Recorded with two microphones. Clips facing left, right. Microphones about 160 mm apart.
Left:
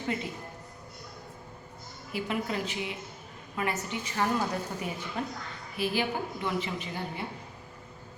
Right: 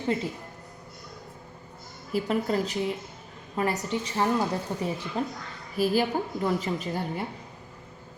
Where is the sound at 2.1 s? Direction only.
40° right (ahead or behind).